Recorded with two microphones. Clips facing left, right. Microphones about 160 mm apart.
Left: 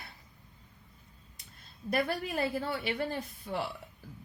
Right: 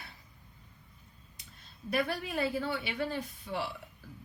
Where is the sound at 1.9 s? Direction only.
45° left (ahead or behind).